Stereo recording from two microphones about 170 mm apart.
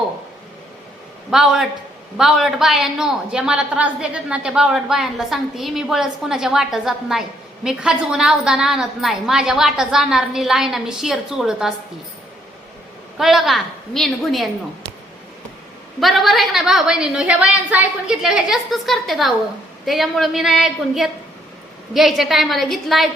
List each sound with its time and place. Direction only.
1.3 s a woman's voice: centre (ahead or behind)
13.1 s a woman's voice: centre (ahead or behind)
16.0 s a woman's voice: centre (ahead or behind)